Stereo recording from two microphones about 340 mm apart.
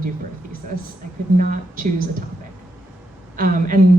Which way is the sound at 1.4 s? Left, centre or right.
Right.